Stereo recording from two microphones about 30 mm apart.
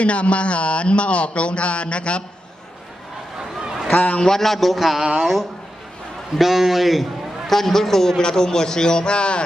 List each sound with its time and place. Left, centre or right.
0.0 s speech: left
3.9 s a man's voice: left
4.4 s a man's voice: centre
4.9 s a woman's voice: centre
6.3 s a man's voice: centre
7.5 s a man's voice: centre; by 9.4 s left